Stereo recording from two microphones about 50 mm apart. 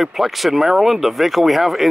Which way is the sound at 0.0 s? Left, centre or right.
Centre.